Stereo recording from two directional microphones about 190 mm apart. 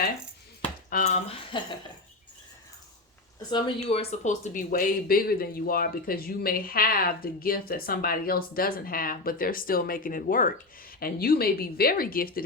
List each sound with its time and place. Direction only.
0.9 s speech: 40° left (ahead or behind)
3.5 s speech: 30° left (ahead or behind); by 12.5 s 50° left (ahead or behind)